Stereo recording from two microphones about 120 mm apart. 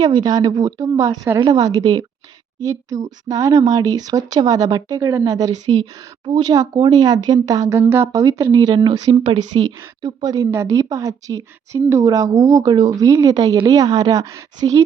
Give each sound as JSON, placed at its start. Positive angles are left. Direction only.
{"t": 0.0, "sound": "a woman's voice", "side_deg": -35}